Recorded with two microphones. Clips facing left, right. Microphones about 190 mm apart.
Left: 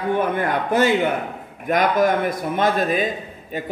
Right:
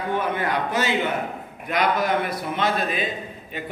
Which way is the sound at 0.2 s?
50° left (ahead or behind).